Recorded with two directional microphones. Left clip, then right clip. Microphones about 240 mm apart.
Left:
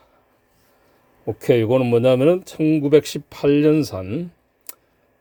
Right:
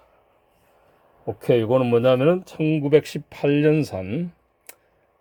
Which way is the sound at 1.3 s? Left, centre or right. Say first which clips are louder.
Left 2 dB; left.